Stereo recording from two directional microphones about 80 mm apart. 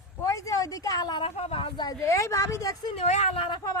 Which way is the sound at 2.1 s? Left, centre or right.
Left.